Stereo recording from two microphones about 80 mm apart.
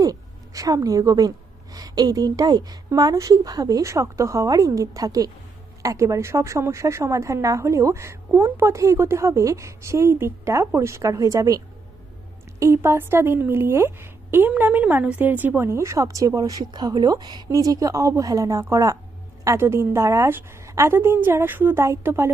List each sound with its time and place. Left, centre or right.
0.0 s a woman's voice: right